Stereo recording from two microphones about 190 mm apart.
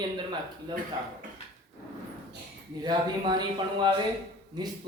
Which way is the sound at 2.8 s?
20° right (ahead or behind).